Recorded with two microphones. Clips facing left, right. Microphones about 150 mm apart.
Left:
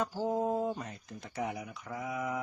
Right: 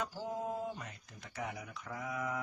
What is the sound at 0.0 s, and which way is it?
Speech, 40° left (ahead or behind).